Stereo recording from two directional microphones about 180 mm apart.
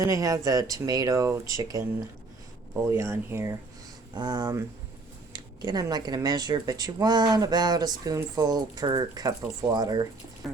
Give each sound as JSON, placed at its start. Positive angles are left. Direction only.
{"t": 0.0, "sound": "speech", "side_deg": -20}
{"t": 2.9, "sound": "speech", "side_deg": -15}